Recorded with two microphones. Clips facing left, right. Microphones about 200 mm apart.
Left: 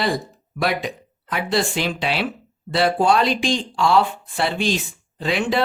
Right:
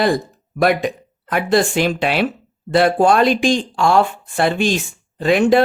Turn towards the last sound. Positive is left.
turn(degrees=-50)  # may be behind; listen again after turning